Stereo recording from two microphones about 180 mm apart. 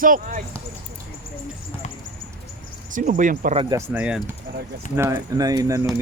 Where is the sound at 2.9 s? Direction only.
45° right (ahead or behind).